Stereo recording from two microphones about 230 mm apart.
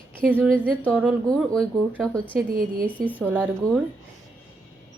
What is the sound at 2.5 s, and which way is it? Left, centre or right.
Speech, right.